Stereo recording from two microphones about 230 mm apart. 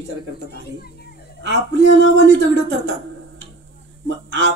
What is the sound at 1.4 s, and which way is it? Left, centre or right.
A man's voice, right.